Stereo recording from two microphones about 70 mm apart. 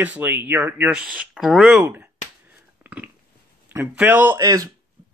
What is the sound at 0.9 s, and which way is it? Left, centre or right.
Speech, centre.